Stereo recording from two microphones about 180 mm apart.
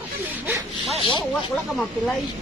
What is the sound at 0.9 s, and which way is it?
Speech, 25° left (ahead or behind).